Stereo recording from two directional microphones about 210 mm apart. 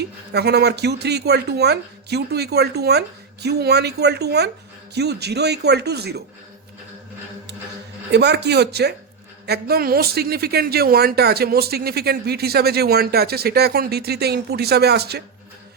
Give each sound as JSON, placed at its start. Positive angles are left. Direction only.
{"t": 0.0, "sound": "speech", "side_deg": -50}
{"t": 8.1, "sound": "speech", "side_deg": -55}